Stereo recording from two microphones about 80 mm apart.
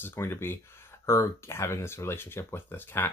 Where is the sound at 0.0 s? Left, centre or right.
Left.